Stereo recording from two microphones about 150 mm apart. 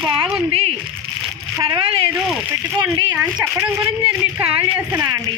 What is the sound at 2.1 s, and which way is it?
Speech, 10° right (ahead or behind).